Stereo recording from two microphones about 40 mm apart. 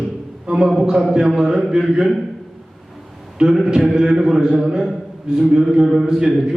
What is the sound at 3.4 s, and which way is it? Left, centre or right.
A man's voice, centre.